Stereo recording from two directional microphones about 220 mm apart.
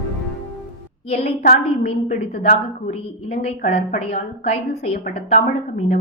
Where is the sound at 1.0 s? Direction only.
30° left (ahead or behind).